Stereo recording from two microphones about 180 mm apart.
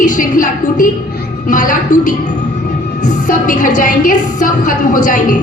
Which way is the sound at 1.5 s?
45° left (ahead or behind).